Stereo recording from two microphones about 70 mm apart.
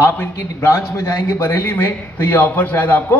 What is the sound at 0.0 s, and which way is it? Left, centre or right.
A man's voice, left.